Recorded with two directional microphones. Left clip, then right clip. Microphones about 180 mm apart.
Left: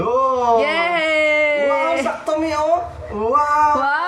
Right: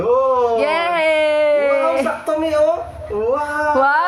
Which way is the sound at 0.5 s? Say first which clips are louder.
Even; 15° right (ahead or behind).